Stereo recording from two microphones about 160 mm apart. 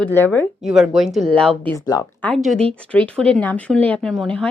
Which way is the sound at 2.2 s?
10° left (ahead or behind).